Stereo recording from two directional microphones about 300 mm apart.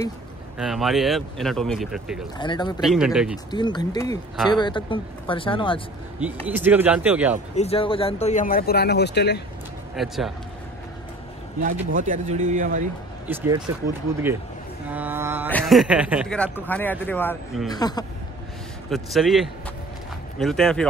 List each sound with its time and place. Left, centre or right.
0.6 s speech: centre
2.3 s speech: centre
2.8 s speech: centre
3.5 s speech: centre
6.4 s speech: centre
7.5 s speech: centre
9.9 s speech: centre
11.6 s speech: right
13.3 s music: centre
14.9 s music: centre
15.4 s speech: centre
18.9 s speech: centre